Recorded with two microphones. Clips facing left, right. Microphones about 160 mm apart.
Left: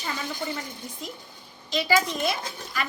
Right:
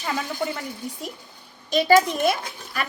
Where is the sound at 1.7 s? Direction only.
50° right (ahead or behind).